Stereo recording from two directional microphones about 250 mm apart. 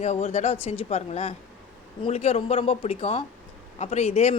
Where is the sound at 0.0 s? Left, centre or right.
Left.